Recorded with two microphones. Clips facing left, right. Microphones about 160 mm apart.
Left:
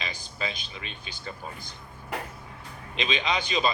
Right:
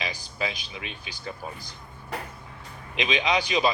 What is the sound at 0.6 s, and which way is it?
Speech, 15° right (ahead or behind).